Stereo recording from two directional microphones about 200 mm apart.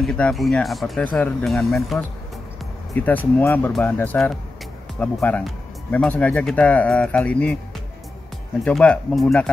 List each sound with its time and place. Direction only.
0.0 s speech: centre (ahead or behind)
8.6 s speech: 5° left (ahead or behind)